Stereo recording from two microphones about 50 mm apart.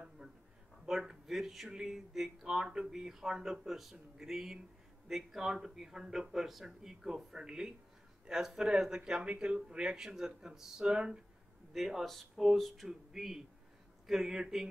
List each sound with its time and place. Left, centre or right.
0.2 s a sound: right
0.8 s speech: centre
9.2 s speech: right
11.7 s a man's voice: centre